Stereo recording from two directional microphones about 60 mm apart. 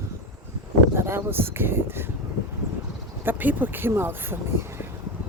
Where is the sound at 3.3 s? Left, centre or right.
Right.